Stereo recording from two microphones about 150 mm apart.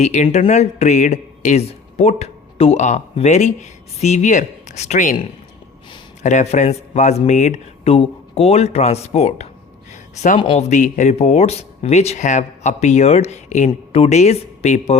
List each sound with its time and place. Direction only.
0.0 s speech: 50° left (ahead or behind)
6.2 s speech: 50° left (ahead or behind)